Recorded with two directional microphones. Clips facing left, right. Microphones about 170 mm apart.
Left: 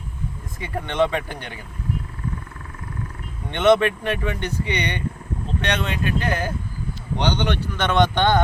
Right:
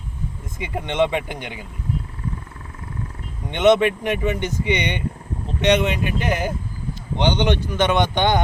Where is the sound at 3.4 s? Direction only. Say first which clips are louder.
Right 1 dB; 15° right (ahead or behind).